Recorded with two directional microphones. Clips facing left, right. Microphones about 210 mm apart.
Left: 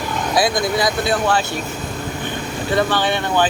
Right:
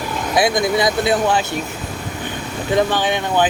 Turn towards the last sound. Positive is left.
turn(degrees=-15)  # may be behind; listen again after turning